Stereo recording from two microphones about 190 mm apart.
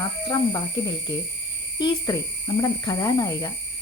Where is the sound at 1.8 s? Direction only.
20° left (ahead or behind).